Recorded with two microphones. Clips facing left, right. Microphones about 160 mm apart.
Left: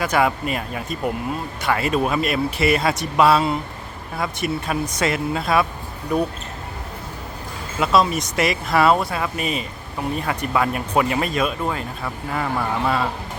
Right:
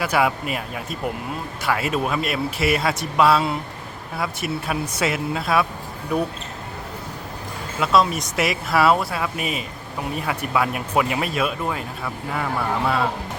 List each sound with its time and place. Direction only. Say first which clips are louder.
0.0 s speech: left 1 dB; 5° right (ahead or behind)
7.8 s speech: left 1 dB; centre (ahead or behind)